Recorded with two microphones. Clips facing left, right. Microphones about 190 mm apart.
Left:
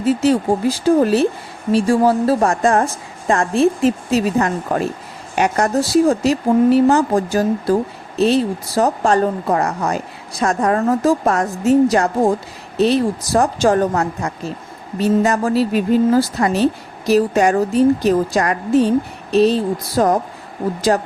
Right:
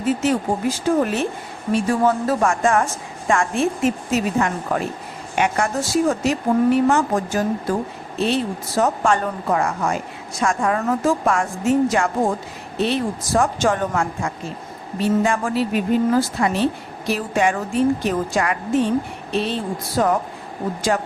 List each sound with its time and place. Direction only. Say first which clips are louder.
0.0 s a woman's voice: left 4 dB; 35° left (ahead or behind)